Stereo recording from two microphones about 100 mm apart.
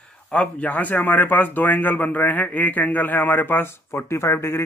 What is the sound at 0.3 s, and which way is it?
A man's voice, 10° left (ahead or behind).